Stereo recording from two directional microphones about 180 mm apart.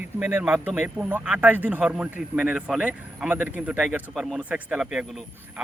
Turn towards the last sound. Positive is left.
turn(degrees=-5)  # may be behind; listen again after turning